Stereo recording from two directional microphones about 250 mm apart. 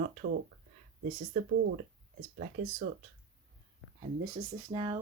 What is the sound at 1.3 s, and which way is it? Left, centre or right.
Speech, right.